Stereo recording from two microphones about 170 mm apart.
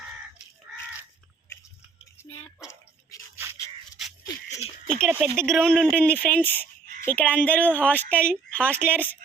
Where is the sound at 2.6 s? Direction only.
20° left (ahead or behind).